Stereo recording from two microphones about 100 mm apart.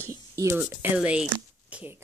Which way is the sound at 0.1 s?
30° right (ahead or behind).